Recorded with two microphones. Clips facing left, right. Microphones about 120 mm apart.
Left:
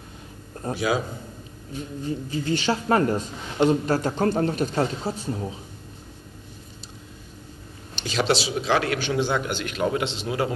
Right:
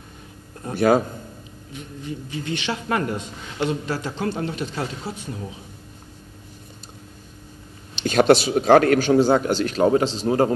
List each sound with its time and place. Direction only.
0.7 s a man's voice: 50° right (ahead or behind)
1.7 s a man's voice: 35° left (ahead or behind)
8.0 s a man's voice: 50° right (ahead or behind)